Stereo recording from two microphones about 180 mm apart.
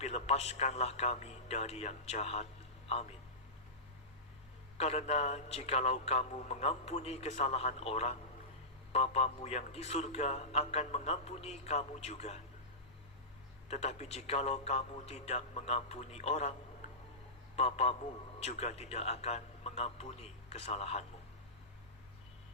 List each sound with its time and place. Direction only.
0.0 s a man's voice: 35° left (ahead or behind)
4.8 s a man's voice: 35° left (ahead or behind)
13.7 s a man's voice: 35° left (ahead or behind)